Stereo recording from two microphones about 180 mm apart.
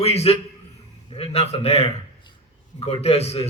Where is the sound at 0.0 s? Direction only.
35° left (ahead or behind).